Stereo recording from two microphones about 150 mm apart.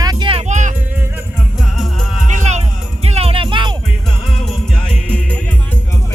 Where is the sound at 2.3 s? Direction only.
50° right (ahead or behind); by 3.7 s 30° right (ahead or behind).